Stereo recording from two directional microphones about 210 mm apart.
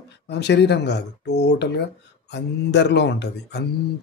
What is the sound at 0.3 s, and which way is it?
Speech, 55° left (ahead or behind).